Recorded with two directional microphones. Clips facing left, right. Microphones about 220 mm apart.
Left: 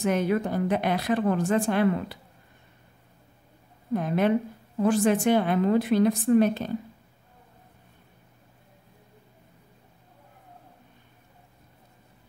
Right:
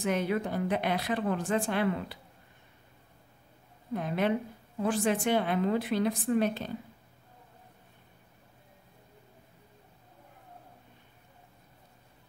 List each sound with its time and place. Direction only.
0.0 s a woman's voice: 45° left (ahead or behind)
3.9 s a woman's voice: 45° left (ahead or behind)